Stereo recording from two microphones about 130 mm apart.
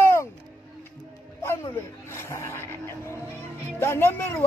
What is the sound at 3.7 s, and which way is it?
Speech, 20° left (ahead or behind).